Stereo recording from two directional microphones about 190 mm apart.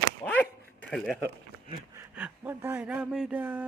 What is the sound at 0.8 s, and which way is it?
Speech, 5° left (ahead or behind).